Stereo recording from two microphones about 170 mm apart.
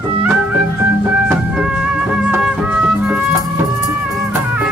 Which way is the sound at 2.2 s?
5° right (ahead or behind).